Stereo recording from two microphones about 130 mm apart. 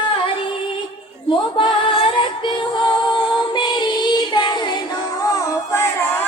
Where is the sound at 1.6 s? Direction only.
40° left (ahead or behind).